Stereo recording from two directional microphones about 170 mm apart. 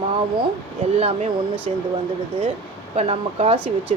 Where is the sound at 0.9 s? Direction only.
40° right (ahead or behind).